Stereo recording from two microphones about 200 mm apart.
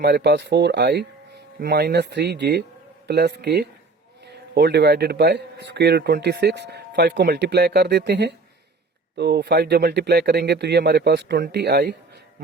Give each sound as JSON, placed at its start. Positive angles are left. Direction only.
{"t": 0.0, "sound": "a man's voice", "side_deg": -55}